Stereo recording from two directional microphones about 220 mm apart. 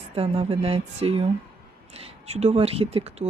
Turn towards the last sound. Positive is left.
turn(degrees=-25)  # may be behind; listen again after turning